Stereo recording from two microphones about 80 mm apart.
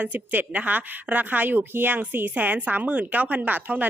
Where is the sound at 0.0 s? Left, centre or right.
Right.